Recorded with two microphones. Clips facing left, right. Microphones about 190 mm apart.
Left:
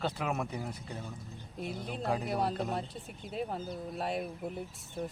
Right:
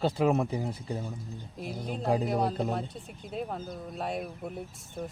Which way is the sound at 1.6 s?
Centre (ahead or behind).